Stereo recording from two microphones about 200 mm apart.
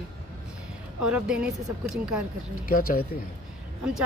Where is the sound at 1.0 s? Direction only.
5° right (ahead or behind).